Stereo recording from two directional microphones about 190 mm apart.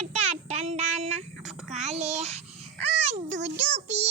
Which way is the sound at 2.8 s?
35° right (ahead or behind).